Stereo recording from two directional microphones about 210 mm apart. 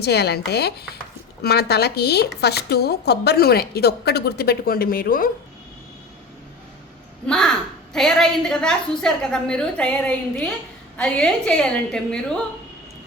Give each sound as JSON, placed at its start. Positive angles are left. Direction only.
{"t": 0.0, "sound": "a woman's voice", "side_deg": 50}
{"t": 7.3, "sound": "a woman's voice", "side_deg": 5}